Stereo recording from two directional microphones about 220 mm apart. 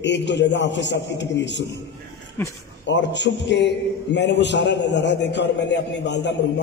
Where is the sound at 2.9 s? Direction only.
55° left (ahead or behind).